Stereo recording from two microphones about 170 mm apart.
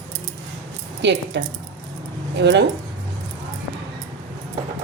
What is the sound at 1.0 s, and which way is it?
Speech, 90° right.